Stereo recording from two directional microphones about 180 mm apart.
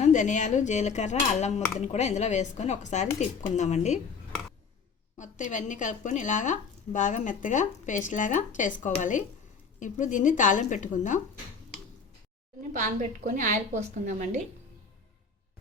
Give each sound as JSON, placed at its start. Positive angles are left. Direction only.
{"t": 0.0, "sound": "speech", "side_deg": 45}
{"t": 5.1, "sound": "speech", "side_deg": 45}
{"t": 12.7, "sound": "a woman's voice", "side_deg": -45}